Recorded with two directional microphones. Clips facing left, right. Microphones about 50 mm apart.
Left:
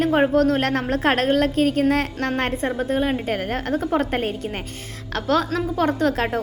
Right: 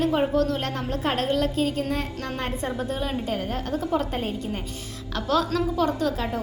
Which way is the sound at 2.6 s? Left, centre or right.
Left.